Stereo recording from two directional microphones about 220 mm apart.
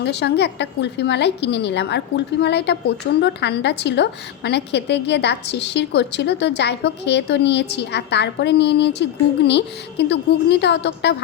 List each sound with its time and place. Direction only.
0.0 s a woman's voice: 50° left (ahead or behind)